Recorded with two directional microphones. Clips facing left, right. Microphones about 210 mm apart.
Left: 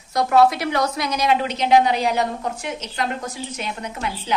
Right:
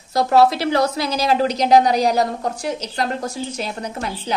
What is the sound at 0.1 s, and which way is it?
A woman's voice, 30° right (ahead or behind).